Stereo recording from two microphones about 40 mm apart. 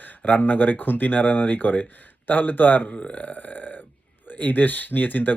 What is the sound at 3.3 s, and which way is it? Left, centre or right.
Speech, left.